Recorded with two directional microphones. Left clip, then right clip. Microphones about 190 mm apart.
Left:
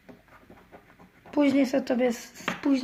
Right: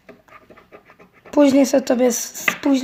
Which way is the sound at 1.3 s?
35° right (ahead or behind).